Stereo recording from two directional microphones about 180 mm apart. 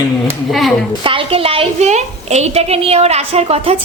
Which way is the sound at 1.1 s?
30° right (ahead or behind).